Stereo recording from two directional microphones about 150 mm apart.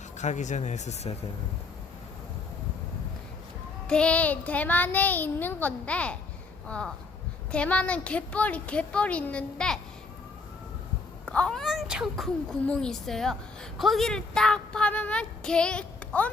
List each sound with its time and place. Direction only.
0.2 s speech: 50° left (ahead or behind)
3.8 s child singing: 5° left (ahead or behind)
11.3 s a child's voice: 5° left (ahead or behind)
13.7 s child singing: centre (ahead or behind)